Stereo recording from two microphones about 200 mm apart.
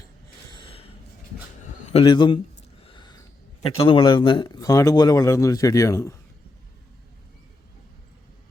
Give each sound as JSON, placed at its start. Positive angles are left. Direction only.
{"t": 0.5, "sound": "gasp", "side_deg": 25}
{"t": 1.9, "sound": "a man's voice", "side_deg": 25}
{"t": 2.8, "sound": "a sound", "side_deg": 25}
{"t": 3.8, "sound": "speech", "side_deg": 25}